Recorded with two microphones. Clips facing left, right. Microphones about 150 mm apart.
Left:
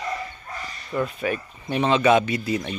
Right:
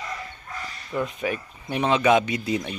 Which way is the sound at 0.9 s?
15° right (ahead or behind).